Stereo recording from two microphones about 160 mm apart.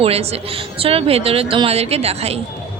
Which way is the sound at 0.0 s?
40° right (ahead or behind).